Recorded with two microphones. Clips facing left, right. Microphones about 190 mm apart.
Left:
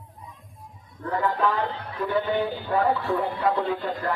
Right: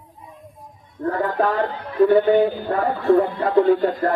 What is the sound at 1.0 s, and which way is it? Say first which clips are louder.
A man's voice: right 4 dB; 45° right (ahead or behind).